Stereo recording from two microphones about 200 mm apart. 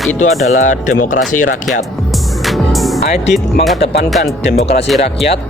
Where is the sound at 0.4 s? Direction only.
40° left (ahead or behind).